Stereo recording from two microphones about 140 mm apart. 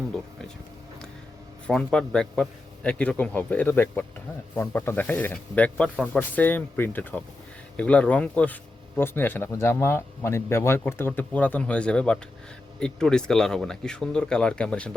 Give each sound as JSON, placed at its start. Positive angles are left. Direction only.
{"t": 1.6, "sound": "speech", "side_deg": 5}